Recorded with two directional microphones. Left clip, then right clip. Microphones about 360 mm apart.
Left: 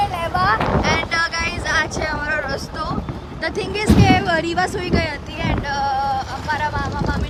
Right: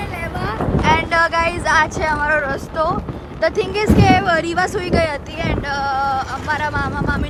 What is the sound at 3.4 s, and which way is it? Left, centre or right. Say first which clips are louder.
Speech: right 5 dB; centre.